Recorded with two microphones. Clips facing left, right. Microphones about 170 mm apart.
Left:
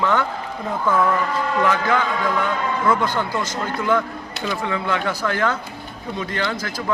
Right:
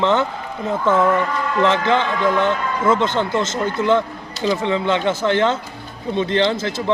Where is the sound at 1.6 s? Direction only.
25° right (ahead or behind).